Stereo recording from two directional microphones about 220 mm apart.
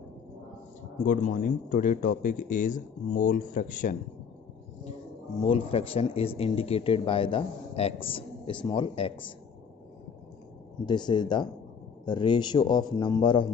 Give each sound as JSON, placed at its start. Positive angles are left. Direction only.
{"t": 1.0, "sound": "speech", "side_deg": 35}
{"t": 5.5, "sound": "speech", "side_deg": 25}
{"t": 10.9, "sound": "speech", "side_deg": 20}